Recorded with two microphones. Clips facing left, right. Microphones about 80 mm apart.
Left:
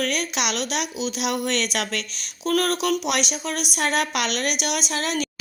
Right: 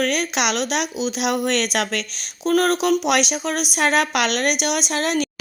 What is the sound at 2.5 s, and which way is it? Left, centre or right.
A woman's voice, right.